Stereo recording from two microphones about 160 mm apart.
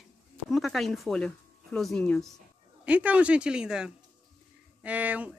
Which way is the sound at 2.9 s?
10° right (ahead or behind).